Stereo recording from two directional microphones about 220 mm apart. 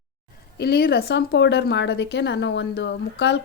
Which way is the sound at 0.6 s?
45° left (ahead or behind).